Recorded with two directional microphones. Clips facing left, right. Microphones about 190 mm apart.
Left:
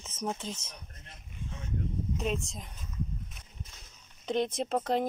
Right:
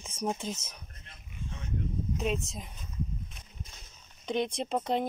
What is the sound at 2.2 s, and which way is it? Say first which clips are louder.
Speech: right 2 dB; centre (ahead or behind).